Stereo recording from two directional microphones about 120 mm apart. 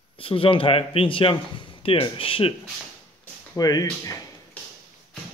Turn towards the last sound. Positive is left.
turn(degrees=30)  # may be behind; listen again after turning